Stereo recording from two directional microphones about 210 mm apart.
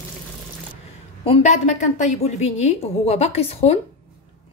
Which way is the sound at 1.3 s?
35° left (ahead or behind).